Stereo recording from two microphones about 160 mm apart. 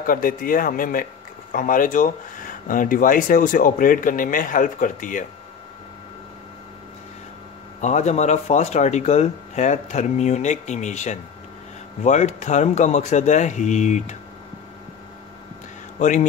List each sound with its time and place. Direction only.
0.0 s speech: 60° left (ahead or behind)
7.8 s speech: 45° left (ahead or behind)
16.0 s speech: 50° left (ahead or behind)